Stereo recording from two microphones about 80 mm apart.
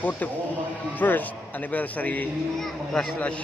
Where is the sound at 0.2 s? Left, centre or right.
Left.